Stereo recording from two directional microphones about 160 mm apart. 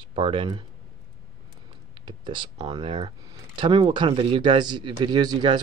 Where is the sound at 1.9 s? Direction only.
30° right (ahead or behind).